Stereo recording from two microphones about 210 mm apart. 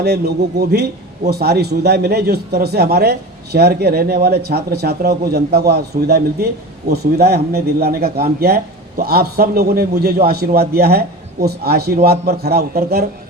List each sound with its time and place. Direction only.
0.0 s a man's voice: 50° right (ahead or behind)